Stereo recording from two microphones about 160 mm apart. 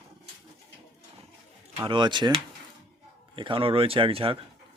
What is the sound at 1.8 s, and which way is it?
Speech, 30° right (ahead or behind).